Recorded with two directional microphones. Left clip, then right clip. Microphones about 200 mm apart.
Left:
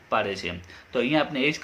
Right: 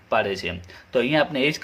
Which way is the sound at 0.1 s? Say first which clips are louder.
Right 3 dB; 30° right (ahead or behind).